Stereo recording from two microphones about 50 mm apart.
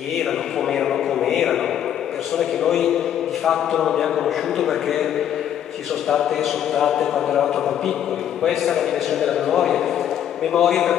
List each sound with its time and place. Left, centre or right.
0.7 s a sound: centre
3.4 s a man's voice: centre
6.0 s a man's voice: centre